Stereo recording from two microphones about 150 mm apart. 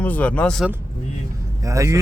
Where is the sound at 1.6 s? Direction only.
20° right (ahead or behind).